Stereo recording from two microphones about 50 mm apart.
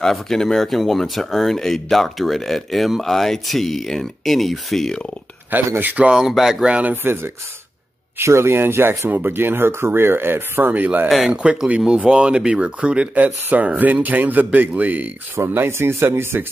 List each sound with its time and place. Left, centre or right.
0.0 s speech: centre
5.5 s speech: right
6.1 s speech: centre
6.8 s speech: right
8.2 s speech: right
10.7 s speech: right
11.1 s speech: centre
11.4 s speech: right
15.3 s speech: right